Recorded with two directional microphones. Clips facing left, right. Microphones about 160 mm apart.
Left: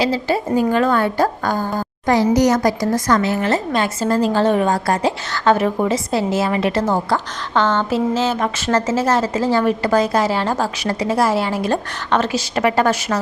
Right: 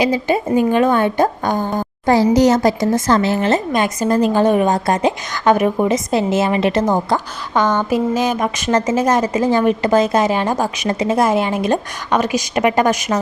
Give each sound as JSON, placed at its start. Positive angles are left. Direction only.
{"t": 0.0, "sound": "a woman's voice", "side_deg": -20}